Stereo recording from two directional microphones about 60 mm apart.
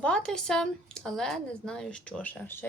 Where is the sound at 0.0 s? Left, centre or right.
Centre.